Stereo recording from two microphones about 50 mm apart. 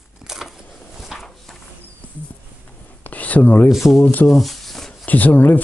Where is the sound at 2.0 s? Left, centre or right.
Left.